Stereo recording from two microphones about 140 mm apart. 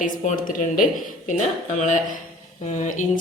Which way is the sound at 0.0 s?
70° left (ahead or behind).